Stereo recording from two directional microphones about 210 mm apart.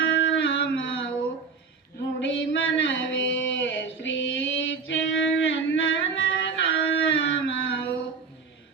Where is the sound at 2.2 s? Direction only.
60° left (ahead or behind).